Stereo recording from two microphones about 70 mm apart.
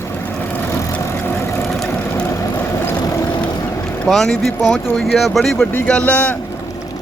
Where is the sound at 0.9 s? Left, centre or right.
Left.